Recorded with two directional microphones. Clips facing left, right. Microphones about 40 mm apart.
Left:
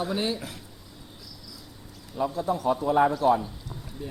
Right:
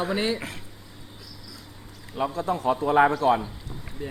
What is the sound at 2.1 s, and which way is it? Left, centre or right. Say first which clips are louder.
Speech: right 1 dB; right.